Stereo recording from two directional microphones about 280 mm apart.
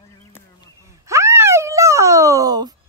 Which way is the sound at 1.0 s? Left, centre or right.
Centre.